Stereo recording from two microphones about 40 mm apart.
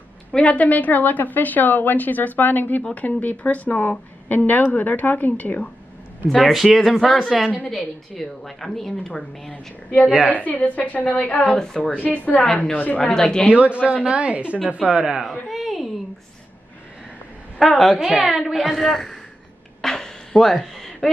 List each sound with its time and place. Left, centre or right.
0.5 s a woman's voice: left
6.5 s speech: centre
6.8 s a woman's voice: centre
7.7 s a woman's voice: centre
9.1 s a woman's voice: left
11.4 s a woman's voice: centre
11.8 s a woman's voice: left
13.1 s a woman's voice: left
13.5 s a woman's voice: right
15.4 s speech: centre
17.6 s a woman's voice: centre
19.8 s a sound: centre